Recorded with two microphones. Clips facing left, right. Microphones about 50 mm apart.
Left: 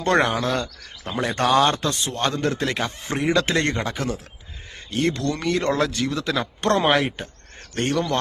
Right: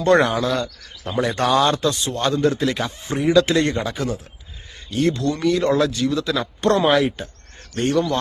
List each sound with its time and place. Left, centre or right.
0.0 s speech: left
3.2 s speech: left
3.4 s speech: left